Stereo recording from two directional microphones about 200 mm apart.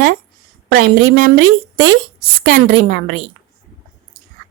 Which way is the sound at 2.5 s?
60° right (ahead or behind).